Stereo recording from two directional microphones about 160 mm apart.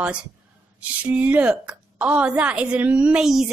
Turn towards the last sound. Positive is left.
turn(degrees=-5)  # may be behind; listen again after turning